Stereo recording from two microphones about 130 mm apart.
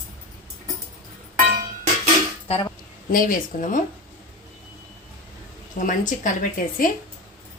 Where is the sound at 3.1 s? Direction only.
90° left.